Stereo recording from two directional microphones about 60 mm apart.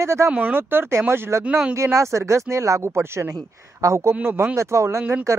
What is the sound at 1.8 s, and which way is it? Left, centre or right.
Speech, right.